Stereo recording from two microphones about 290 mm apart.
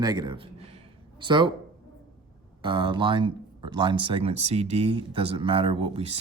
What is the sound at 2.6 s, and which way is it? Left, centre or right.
Speech, centre.